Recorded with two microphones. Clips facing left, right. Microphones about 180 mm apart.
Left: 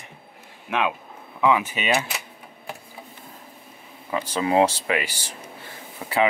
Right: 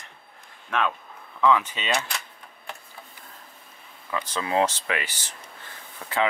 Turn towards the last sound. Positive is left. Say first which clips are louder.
# left 4 dB
turn(degrees=10)  # may be behind; listen again after turning